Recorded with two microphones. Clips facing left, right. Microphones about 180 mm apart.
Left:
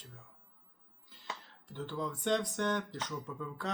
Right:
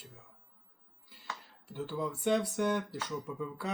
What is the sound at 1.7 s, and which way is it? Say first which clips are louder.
Speech: right 2 dB; 5° right (ahead or behind).